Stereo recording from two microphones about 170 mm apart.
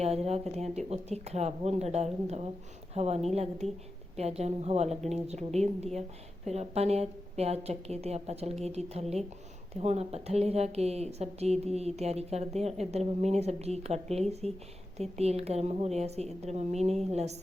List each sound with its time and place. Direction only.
0.0 s a woman's voice: 35° right (ahead or behind)